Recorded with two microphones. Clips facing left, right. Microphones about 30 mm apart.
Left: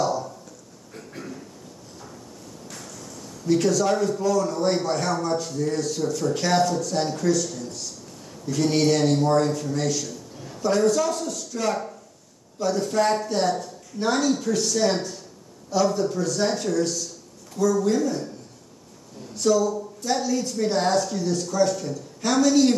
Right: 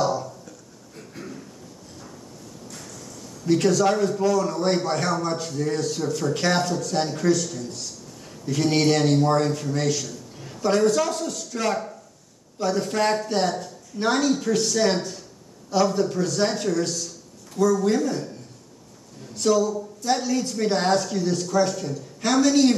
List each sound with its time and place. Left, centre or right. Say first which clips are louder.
3.4 s a man's voice: right 1 dB; centre
8.5 s a man's voice: even; centre
19.3 s a man's voice: even; centre